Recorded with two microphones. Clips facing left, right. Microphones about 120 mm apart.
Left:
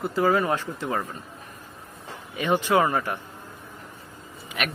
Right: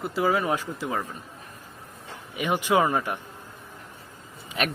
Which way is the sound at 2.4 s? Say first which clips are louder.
Left 1 dB; 15° right (ahead or behind).